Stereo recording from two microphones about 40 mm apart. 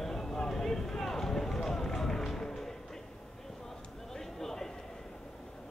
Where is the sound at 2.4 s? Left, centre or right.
Centre.